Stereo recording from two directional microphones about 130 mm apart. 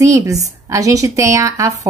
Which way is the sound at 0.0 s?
25° right (ahead or behind).